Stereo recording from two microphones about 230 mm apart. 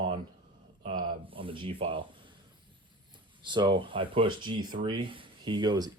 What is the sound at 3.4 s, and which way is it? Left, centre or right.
Speech, centre.